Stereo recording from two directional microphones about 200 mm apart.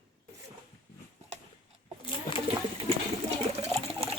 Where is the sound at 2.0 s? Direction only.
25° left (ahead or behind).